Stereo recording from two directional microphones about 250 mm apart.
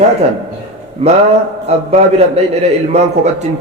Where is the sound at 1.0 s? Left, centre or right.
Right.